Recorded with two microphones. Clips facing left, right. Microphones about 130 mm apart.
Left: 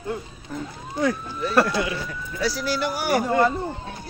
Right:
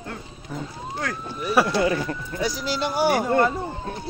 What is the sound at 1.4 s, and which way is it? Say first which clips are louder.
Speech: even; 10° right (ahead or behind).